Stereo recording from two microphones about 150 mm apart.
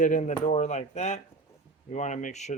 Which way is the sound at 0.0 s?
55° left (ahead or behind).